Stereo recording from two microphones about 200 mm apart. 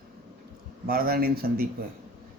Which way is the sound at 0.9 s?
45° right (ahead or behind).